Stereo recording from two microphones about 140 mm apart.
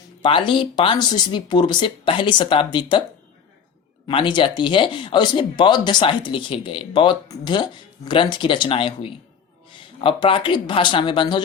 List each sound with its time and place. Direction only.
0.2 s speech: 35° left (ahead or behind)
4.0 s speech: 35° left (ahead or behind)